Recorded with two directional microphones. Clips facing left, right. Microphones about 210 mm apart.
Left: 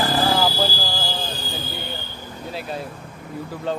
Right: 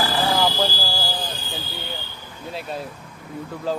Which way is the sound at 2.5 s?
Centre (ahead or behind).